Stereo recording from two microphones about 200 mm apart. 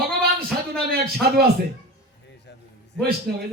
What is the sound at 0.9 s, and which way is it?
Speech, 50° right (ahead or behind).